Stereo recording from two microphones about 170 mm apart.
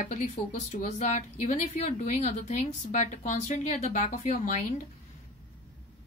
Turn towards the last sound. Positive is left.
turn(degrees=45)  # may be behind; listen again after turning